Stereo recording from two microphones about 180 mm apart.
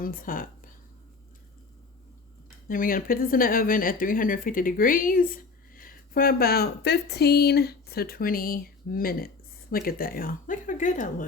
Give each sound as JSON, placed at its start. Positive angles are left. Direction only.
{"t": 0.0, "sound": "speech", "side_deg": 50}
{"t": 2.6, "sound": "speech", "side_deg": 50}